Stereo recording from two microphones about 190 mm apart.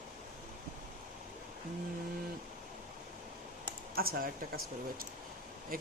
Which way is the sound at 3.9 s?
50° right (ahead or behind).